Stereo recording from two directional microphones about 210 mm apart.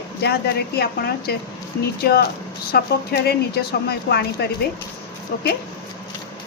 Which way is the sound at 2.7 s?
50° left (ahead or behind).